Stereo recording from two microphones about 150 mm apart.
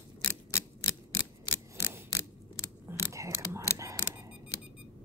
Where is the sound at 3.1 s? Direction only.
20° right (ahead or behind).